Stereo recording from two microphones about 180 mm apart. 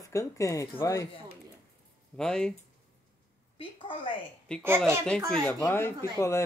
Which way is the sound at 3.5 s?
30° left (ahead or behind).